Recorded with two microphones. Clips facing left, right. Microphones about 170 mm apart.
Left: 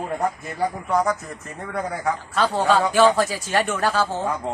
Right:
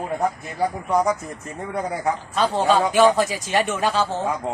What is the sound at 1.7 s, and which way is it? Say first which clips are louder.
Speech: right 1 dB; 15° right (ahead or behind).